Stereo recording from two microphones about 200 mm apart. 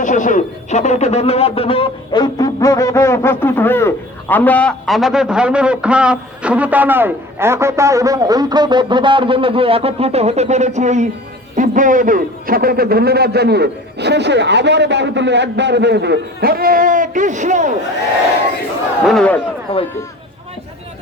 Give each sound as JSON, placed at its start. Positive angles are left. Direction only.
{"t": 0.0, "sound": "a man's voice", "side_deg": 40}
{"t": 19.0, "sound": "a man's voice", "side_deg": 5}